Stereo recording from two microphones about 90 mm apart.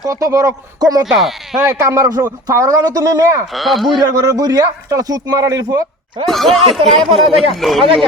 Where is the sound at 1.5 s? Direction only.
35° right (ahead or behind).